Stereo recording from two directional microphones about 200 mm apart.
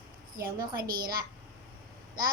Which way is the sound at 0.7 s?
45° right (ahead or behind).